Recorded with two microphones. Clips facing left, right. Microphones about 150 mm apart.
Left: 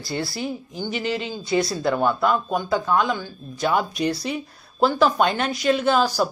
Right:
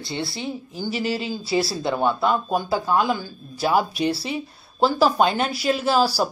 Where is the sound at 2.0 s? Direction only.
25° right (ahead or behind).